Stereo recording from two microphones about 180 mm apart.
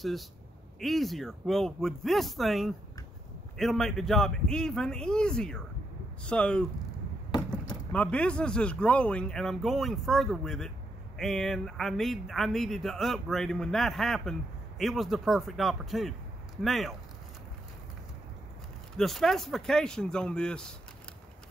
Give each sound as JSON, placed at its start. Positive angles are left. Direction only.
{"t": 0.7, "sound": "speech", "side_deg": 0}
{"t": 7.2, "sound": "a sound", "side_deg": 25}
{"t": 7.9, "sound": "speech", "side_deg": 5}
{"t": 18.9, "sound": "speech", "side_deg": 0}